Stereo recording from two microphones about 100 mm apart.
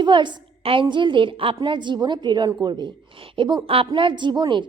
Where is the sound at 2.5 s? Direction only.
35° right (ahead or behind).